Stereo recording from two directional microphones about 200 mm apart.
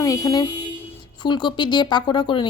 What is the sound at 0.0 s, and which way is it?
Speech, 15° left (ahead or behind).